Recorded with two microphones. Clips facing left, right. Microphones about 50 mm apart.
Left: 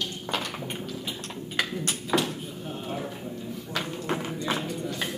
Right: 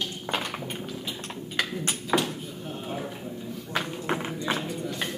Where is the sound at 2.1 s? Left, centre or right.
Centre.